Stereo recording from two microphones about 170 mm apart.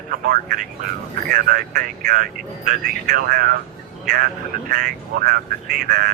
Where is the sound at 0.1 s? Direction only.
55° right (ahead or behind).